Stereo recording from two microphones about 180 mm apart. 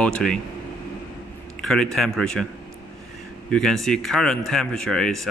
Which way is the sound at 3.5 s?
5° left (ahead or behind).